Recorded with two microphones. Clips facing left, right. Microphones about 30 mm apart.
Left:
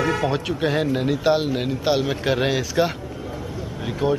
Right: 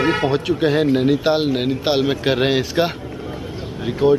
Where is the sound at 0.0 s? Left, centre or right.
Right.